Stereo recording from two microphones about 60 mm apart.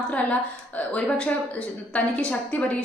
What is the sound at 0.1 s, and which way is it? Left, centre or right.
A woman's voice, left.